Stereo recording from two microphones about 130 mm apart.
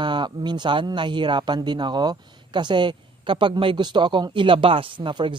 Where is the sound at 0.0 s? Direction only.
35° right (ahead or behind).